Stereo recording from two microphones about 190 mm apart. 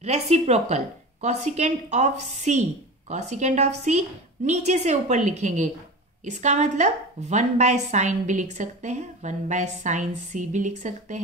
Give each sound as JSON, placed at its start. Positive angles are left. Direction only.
{"t": 0.0, "sound": "a woman's voice", "side_deg": -35}